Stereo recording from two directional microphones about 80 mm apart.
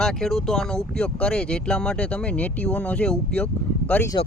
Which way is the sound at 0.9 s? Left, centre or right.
Centre.